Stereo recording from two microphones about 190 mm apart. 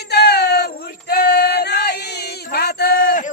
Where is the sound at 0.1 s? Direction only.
60° left (ahead or behind).